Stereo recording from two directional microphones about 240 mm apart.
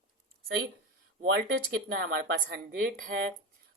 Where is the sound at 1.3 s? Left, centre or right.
Right.